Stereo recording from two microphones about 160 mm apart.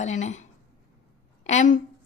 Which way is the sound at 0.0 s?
45° left (ahead or behind).